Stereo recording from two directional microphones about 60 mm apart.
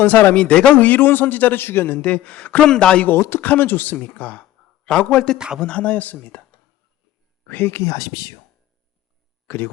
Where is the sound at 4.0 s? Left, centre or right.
Left.